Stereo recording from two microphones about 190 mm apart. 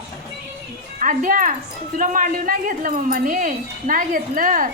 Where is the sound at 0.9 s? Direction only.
45° right (ahead or behind).